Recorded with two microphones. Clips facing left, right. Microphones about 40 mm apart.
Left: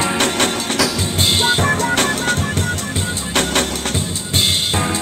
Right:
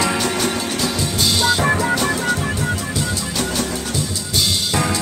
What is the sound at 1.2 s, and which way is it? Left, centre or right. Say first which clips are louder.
Music: left 1 dB; left.